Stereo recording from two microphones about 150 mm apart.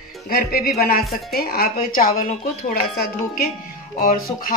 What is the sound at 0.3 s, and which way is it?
Speech, 90° left.